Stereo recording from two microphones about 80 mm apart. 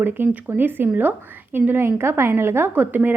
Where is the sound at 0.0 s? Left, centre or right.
Right.